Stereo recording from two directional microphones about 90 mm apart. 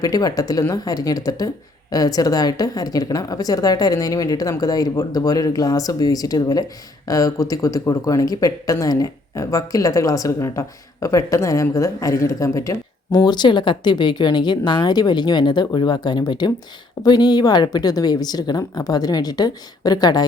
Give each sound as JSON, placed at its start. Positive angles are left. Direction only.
{"t": 0.0, "sound": "a woman's voice", "side_deg": 45}
{"t": 13.2, "sound": "a woman's voice", "side_deg": 55}